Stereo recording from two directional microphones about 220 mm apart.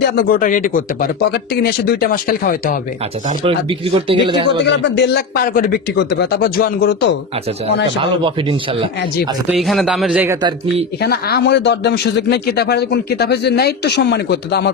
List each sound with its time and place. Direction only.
0.1 s speech: 40° left (ahead or behind)
3.3 s speech: 25° right (ahead or behind)
4.6 s speech: 50° left (ahead or behind)
8.0 s speech: 25° right (ahead or behind)
9.5 s a man's voice: centre (ahead or behind)
11.0 s speech: 45° left (ahead or behind)